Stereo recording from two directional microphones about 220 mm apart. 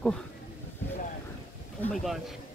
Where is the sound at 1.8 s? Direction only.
Centre (ahead or behind).